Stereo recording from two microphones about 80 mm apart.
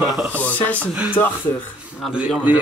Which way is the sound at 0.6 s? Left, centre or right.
Centre.